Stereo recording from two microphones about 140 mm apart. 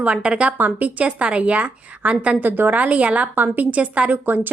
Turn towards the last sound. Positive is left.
turn(degrees=-15)  # may be behind; listen again after turning